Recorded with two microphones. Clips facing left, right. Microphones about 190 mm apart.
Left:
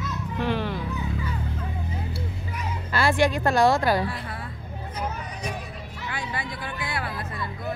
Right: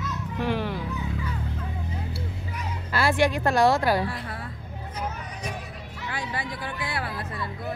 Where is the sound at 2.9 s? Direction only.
5° right (ahead or behind).